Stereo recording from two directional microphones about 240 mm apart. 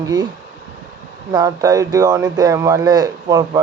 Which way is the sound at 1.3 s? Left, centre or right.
Centre.